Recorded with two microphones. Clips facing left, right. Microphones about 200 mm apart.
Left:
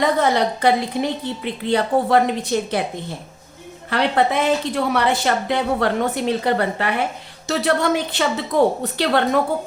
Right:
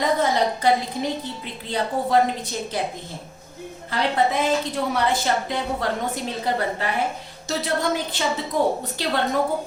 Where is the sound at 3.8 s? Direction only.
70° left (ahead or behind).